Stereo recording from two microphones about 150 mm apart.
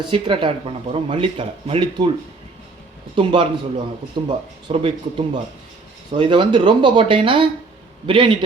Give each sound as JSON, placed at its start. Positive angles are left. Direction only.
{"t": 0.0, "sound": "speech", "side_deg": -35}
{"t": 3.2, "sound": "speech", "side_deg": -35}